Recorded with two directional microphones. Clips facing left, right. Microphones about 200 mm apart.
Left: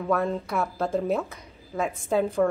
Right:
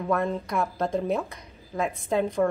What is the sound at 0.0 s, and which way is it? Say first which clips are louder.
A woman's voice: left 1 dB; centre (ahead or behind).